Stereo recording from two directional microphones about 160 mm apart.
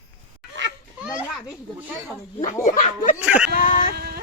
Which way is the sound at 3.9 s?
80° right.